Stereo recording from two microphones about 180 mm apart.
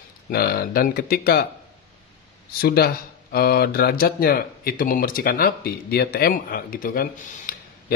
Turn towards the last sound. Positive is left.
turn(degrees=50)  # may be behind; listen again after turning